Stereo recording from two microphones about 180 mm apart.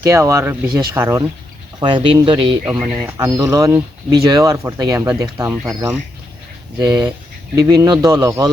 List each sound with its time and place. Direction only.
0.0 s speech: 15° right (ahead or behind)
1.8 s speech: 25° right (ahead or behind)
2.6 s speech: 10° right (ahead or behind)
7.5 s speech: 20° right (ahead or behind)